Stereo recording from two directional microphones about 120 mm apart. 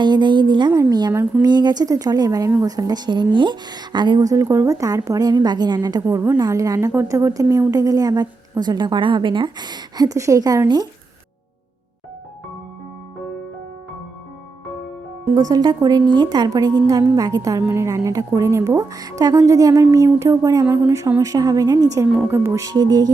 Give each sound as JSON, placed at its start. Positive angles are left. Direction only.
{"t": 0.0, "sound": "a woman's voice", "side_deg": -40}
{"t": 0.7, "sound": "a woman's voice", "side_deg": -25}
{"t": 1.4, "sound": "speech", "side_deg": -35}
{"t": 15.4, "sound": "a woman's voice", "side_deg": -30}